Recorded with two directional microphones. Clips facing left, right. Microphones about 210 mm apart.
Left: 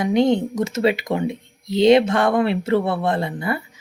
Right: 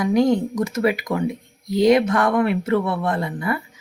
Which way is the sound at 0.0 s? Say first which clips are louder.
Even; 25° left (ahead or behind).